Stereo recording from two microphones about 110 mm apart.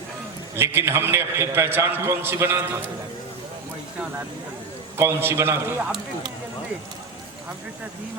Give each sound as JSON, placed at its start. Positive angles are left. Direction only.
{"t": 0.5, "sound": "a man's voice", "side_deg": -20}
{"t": 4.9, "sound": "a man's voice", "side_deg": -20}